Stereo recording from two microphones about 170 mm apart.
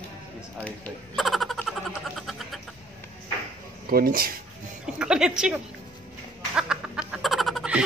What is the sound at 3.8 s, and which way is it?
Speech, 60° right (ahead or behind).